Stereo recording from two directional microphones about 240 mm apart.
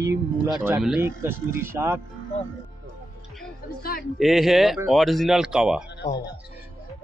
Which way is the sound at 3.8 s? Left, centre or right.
Left.